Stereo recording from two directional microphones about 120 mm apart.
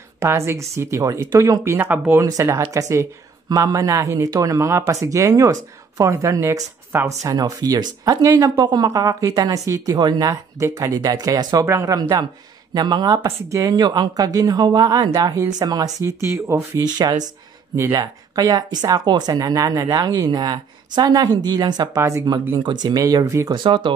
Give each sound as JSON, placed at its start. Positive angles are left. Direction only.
{"t": 0.2, "sound": "speech", "side_deg": -25}
{"t": 2.2, "sound": "speech", "side_deg": -25}
{"t": 7.2, "sound": "speech", "side_deg": -30}
{"t": 16.8, "sound": "speech", "side_deg": -35}
{"t": 23.5, "sound": "speech", "side_deg": -40}